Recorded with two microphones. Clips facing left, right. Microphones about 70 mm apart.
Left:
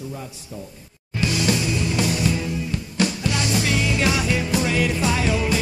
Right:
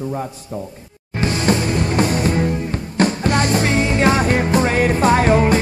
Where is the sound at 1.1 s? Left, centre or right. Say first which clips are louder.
Right 4 dB; right.